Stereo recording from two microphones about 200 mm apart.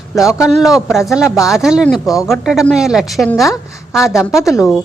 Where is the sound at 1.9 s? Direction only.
15° left (ahead or behind).